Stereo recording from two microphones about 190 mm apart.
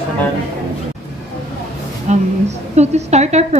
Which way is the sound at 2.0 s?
35° right (ahead or behind).